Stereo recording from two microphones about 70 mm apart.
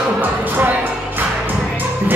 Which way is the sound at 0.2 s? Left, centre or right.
Right.